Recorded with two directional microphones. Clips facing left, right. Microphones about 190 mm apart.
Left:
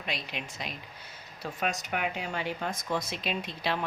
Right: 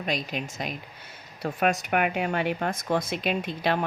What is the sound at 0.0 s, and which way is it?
Speech, 45° right (ahead or behind).